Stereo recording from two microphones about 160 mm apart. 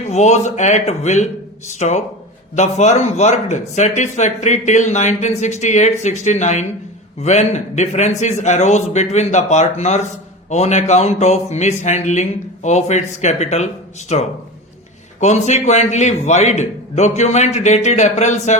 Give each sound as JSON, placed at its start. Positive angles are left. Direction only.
{"t": 0.1, "sound": "speech", "side_deg": 45}